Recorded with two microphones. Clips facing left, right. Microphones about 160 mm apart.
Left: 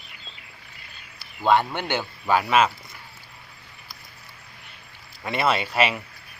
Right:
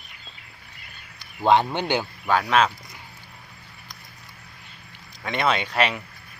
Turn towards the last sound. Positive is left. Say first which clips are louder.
# left 1 dB
turn(degrees=5)  # may be behind; listen again after turning